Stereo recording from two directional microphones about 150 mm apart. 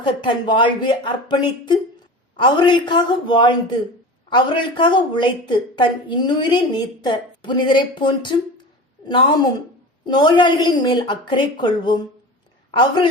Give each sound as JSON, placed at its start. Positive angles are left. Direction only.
{"t": 0.0, "sound": "a woman's voice", "side_deg": 30}